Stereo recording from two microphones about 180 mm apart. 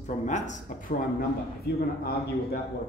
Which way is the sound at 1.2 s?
60° left (ahead or behind).